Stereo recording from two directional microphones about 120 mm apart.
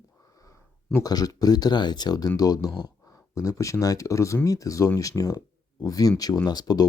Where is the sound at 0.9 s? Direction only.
30° left (ahead or behind).